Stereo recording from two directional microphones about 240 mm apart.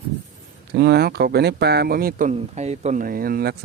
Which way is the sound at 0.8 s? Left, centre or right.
Right.